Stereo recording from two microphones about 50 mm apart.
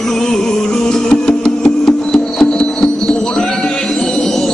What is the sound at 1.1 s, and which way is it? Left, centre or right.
Music, centre.